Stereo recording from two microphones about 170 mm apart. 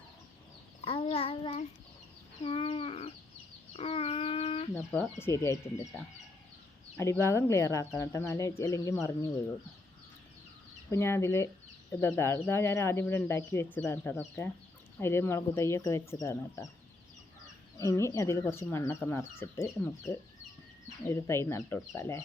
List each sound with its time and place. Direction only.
0.9 s child singing: 35° left (ahead or behind)
2.4 s a sound: 30° left (ahead or behind)
4.9 s speech: 15° left (ahead or behind)
6.9 s speech: 15° left (ahead or behind)
10.9 s speech: 15° left (ahead or behind)
17.7 s speech: 20° left (ahead or behind)